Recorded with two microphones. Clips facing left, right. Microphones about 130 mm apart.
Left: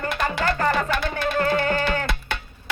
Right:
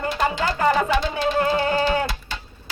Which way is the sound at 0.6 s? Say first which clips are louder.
Right 5 dB; 15° right (ahead or behind).